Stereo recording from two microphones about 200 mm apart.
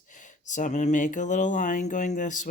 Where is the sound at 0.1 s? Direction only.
40° left (ahead or behind).